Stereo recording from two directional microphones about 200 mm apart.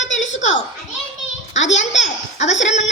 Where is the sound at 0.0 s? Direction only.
70° left (ahead or behind).